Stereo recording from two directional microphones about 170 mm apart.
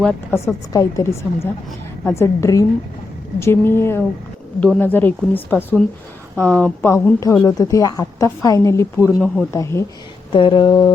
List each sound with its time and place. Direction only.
0.0 s a woman's voice: 10° left (ahead or behind)
2.0 s a woman's voice: 15° left (ahead or behind)
9.0 s speech: centre (ahead or behind)
9.5 s a woman's voice: 15° left (ahead or behind)
10.3 s speech: 30° left (ahead or behind)